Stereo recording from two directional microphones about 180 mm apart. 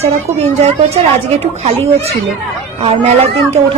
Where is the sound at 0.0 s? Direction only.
35° right (ahead or behind).